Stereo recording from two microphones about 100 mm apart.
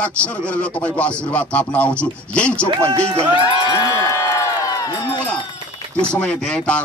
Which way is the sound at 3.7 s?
35° left (ahead or behind).